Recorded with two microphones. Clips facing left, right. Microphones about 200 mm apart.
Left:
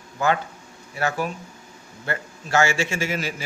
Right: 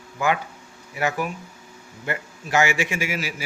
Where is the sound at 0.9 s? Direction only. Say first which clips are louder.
Even; 15° right (ahead or behind).